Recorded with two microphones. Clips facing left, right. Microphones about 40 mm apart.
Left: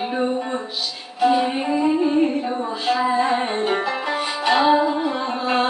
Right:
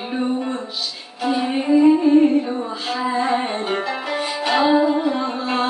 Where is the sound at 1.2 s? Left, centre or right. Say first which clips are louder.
Left 3 dB; centre.